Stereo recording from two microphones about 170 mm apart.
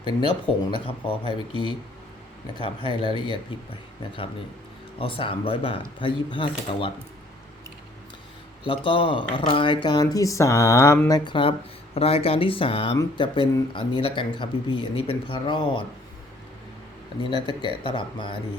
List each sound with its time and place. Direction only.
0.0 s speech: 30° left (ahead or behind)
4.9 s speech: 30° left (ahead or behind)
8.6 s speech: 30° left (ahead or behind)
11.2 s speech: 30° left (ahead or behind)
17.3 s speech: 25° left (ahead or behind)